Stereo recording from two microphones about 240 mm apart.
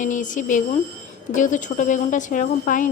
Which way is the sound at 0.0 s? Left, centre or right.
Left.